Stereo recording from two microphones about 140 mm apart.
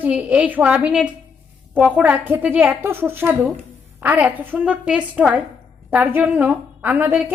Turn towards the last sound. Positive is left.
turn(degrees=-10)  # may be behind; listen again after turning